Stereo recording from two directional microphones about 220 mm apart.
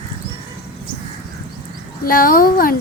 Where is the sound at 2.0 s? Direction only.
40° left (ahead or behind).